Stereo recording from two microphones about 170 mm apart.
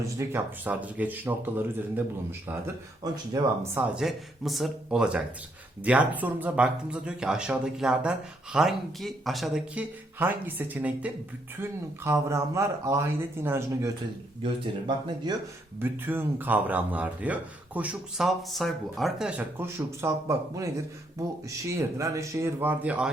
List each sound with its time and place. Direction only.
0.2 s speech: 15° right (ahead or behind)
3.0 s speech: 20° right (ahead or behind)
3.8 s speech: centre (ahead or behind)
14.4 s speech: 30° right (ahead or behind)
15.8 s speech: 10° right (ahead or behind)
19.4 s speech: 15° right (ahead or behind)
21.7 s speech: 20° right (ahead or behind)